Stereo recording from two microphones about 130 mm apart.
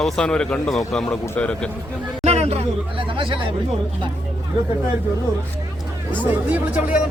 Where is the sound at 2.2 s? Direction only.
55° right (ahead or behind).